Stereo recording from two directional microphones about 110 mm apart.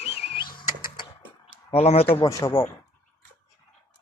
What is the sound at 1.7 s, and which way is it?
Speech, 65° left (ahead or behind).